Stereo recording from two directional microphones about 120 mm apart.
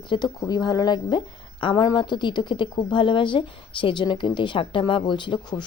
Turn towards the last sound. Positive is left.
turn(degrees=40)  # may be behind; listen again after turning